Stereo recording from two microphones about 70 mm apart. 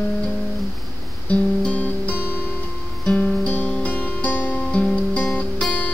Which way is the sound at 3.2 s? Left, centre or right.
Centre.